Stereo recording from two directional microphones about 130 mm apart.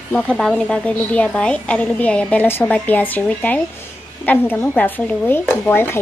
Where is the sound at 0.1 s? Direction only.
10° left (ahead or behind).